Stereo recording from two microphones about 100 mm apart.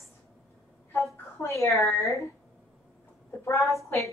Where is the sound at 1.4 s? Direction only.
30° left (ahead or behind).